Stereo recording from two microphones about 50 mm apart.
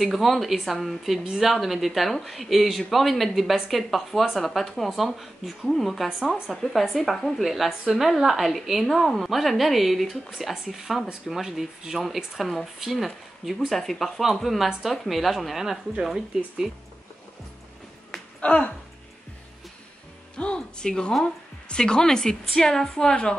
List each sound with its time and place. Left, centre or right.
0.0 s speech: centre
18.4 s speech: left
20.5 s a woman's voice: centre